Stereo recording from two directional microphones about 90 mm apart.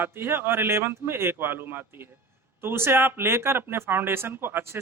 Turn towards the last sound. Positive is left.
turn(degrees=-25)  # may be behind; listen again after turning